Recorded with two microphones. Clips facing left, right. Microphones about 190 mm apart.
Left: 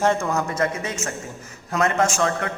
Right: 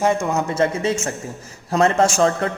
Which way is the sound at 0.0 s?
15° right (ahead or behind).